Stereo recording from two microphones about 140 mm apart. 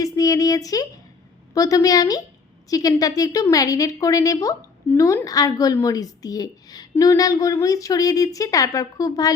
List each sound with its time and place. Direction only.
0.0 s speech: 25° left (ahead or behind)